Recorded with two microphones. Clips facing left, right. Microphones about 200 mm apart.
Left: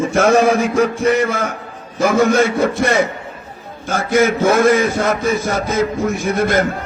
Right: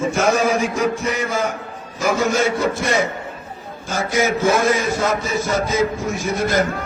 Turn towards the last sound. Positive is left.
turn(degrees=55)  # may be behind; listen again after turning